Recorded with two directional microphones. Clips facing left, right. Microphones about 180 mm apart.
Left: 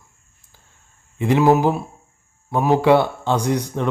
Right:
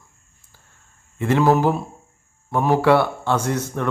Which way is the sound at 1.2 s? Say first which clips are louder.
Left 2 dB; 15° left (ahead or behind).